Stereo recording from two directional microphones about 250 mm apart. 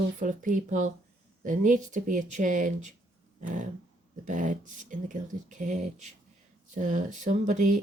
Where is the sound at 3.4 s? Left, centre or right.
Right.